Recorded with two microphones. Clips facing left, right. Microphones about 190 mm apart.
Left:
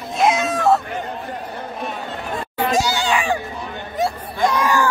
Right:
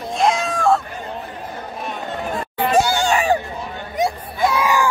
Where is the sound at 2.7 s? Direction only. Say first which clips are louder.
Right 4 dB; 50° right (ahead or behind).